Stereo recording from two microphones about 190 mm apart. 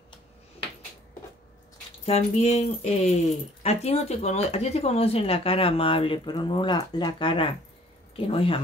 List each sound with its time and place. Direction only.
2.0 s speech: 35° left (ahead or behind)